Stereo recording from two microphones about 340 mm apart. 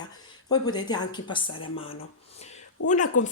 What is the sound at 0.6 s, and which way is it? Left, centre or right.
Speech, centre.